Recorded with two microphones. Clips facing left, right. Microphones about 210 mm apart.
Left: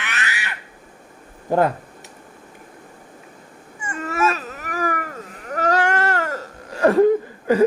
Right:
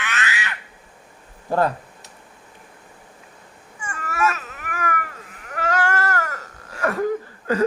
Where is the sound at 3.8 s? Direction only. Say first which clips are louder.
Left 2 dB; 20° left (ahead or behind).